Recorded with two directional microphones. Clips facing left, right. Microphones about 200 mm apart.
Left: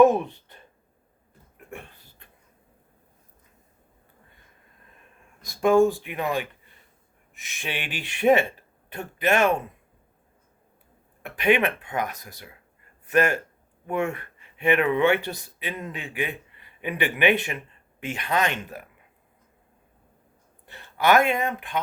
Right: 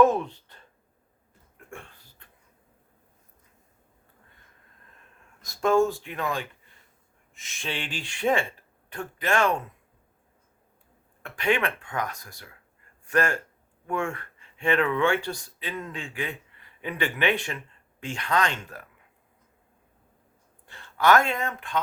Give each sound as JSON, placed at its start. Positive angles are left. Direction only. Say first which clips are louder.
{"t": 0.0, "sound": "speech", "louder": "left 3 dB", "side_deg": 15}
{"t": 1.5, "sound": "a sound", "louder": "left 3 dB", "side_deg": 15}
{"t": 5.5, "sound": "speech", "louder": "left 4 dB", "side_deg": 15}
{"t": 7.5, "sound": "speech", "louder": "left 1 dB", "side_deg": 15}
{"t": 11.2, "sound": "speech", "louder": "left 4 dB", "side_deg": 20}
{"t": 20.7, "sound": "speech", "louder": "even", "side_deg": 20}